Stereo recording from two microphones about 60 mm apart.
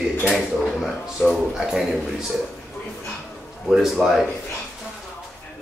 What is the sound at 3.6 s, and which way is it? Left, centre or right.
Speech, centre.